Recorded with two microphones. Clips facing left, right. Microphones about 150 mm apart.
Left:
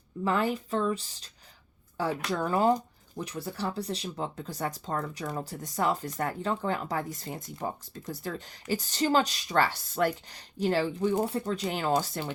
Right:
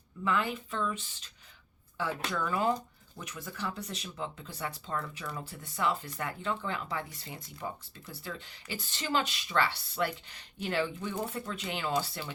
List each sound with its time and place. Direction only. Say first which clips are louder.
0.3 s speech: left 4 dB; 40° left (ahead or behind)